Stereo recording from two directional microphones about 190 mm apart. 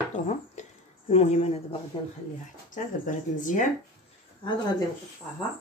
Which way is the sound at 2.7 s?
40° left (ahead or behind).